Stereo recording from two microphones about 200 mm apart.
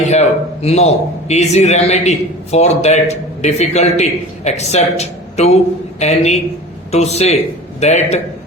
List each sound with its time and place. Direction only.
0.1 s a man's voice: 30° left (ahead or behind)